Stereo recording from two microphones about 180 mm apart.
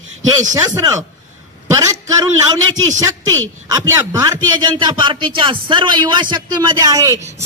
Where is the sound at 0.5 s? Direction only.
20° right (ahead or behind).